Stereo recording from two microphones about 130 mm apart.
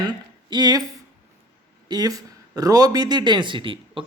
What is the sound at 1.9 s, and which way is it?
Speech, 30° right (ahead or behind).